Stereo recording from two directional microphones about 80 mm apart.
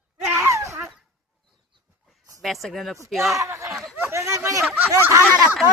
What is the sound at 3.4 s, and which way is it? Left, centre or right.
Speech, right.